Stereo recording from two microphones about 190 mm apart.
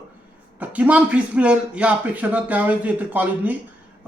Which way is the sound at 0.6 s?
10° right (ahead or behind).